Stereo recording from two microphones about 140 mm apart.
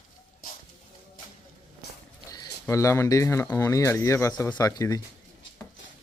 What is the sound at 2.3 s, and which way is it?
Speech, 25° left (ahead or behind).